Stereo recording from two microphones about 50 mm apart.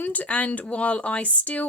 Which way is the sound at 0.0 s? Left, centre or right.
Left.